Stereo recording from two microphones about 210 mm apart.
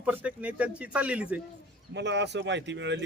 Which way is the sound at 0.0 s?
5° right (ahead or behind).